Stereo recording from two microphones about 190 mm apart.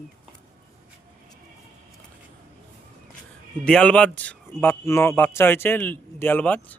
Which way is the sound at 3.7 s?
5° left (ahead or behind).